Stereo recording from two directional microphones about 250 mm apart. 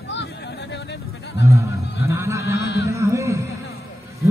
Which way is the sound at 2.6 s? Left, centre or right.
Left.